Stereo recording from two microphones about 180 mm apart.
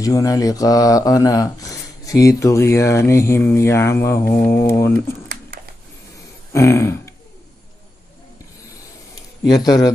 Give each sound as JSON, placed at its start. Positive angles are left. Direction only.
{"t": 0.0, "sound": "speech", "side_deg": 20}
{"t": 6.5, "sound": "speech", "side_deg": 15}
{"t": 9.7, "sound": "a man's voice", "side_deg": 20}